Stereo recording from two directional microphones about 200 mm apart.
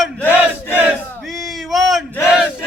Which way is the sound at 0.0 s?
10° left (ahead or behind).